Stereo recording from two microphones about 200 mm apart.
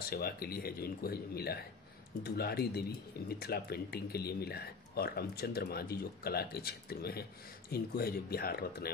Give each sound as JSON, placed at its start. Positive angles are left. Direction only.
{"t": 0.1, "sound": "speech", "side_deg": 50}